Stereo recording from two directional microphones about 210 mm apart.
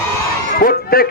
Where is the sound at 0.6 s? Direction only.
45° left (ahead or behind).